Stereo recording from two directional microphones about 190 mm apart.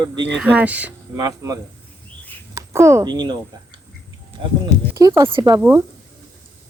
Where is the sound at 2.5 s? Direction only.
15° right (ahead or behind).